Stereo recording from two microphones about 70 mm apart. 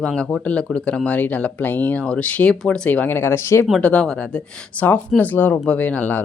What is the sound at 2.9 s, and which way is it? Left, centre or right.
Speech, left.